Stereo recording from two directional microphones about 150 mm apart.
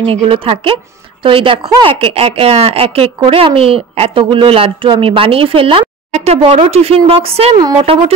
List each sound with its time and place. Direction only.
0.0 s speech: 40° right (ahead or behind)